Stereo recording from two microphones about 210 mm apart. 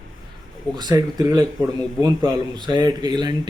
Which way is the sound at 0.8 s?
20° right (ahead or behind).